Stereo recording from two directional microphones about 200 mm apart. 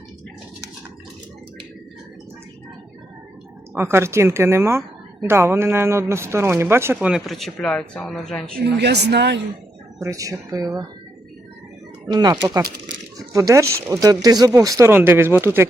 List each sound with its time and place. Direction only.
3.8 s speech: 10° right (ahead or behind); by 8.6 s 5° left (ahead or behind)
8.6 s speech: 55° right (ahead or behind)
10.0 s speech: 15° right (ahead or behind)
12.0 s speech: 20° right (ahead or behind)